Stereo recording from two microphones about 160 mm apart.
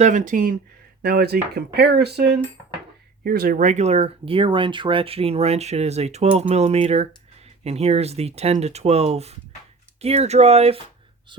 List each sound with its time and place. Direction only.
0.0 s speech: 50° right (ahead or behind)
1.0 s speech: 80° right
3.2 s speech: 65° right (ahead or behind); by 10.8 s 40° right (ahead or behind)